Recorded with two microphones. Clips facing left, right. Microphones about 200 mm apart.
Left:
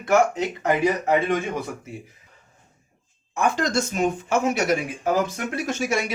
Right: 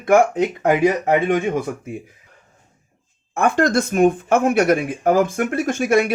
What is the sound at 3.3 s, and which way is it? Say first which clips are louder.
Speech: right 5 dB; 55° right (ahead or behind).